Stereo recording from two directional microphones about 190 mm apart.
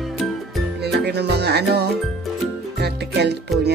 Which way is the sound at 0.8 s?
60° right (ahead or behind).